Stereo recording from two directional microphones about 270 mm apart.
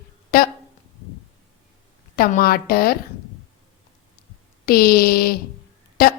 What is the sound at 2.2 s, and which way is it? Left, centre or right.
Speech, left.